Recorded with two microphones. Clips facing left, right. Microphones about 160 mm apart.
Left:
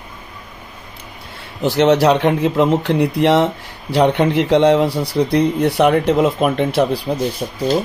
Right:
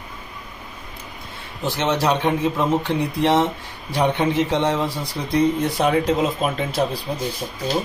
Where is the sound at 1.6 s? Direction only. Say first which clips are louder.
Left 9 dB; 75° left (ahead or behind); by 3.4 s 90° left.